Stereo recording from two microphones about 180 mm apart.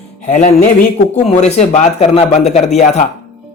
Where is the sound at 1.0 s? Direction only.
40° left (ahead or behind).